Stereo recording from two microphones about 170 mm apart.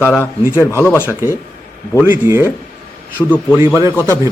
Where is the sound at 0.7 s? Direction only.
15° left (ahead or behind).